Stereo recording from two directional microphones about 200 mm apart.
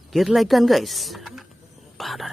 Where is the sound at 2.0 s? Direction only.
Centre (ahead or behind).